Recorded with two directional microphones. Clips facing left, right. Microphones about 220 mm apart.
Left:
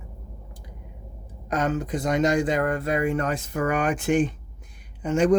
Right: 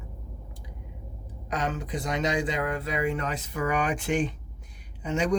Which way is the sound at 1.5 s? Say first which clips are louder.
Left 5 dB; 45° left (ahead or behind).